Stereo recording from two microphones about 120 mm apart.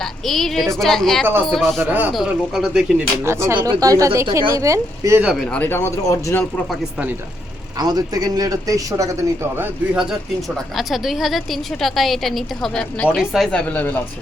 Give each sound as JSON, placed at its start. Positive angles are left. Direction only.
{"t": 0.3, "sound": "a woman's voice", "side_deg": 0}
{"t": 1.8, "sound": "speech", "side_deg": -15}
{"t": 2.1, "sound": "a woman's voice", "side_deg": -5}
{"t": 3.2, "sound": "speech", "side_deg": -25}
{"t": 5.4, "sound": "speech", "side_deg": 15}
{"t": 7.8, "sound": "speech", "side_deg": -35}
{"t": 9.6, "sound": "a woman's voice", "side_deg": -10}